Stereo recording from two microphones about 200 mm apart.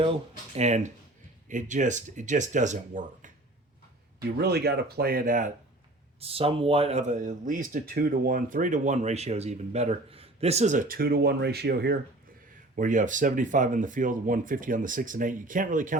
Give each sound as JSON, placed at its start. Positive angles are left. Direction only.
{"t": 0.5, "sound": "speech", "side_deg": -35}
{"t": 4.4, "sound": "speech", "side_deg": -55}
{"t": 6.1, "sound": "speech", "side_deg": -30}
{"t": 12.7, "sound": "speech", "side_deg": -40}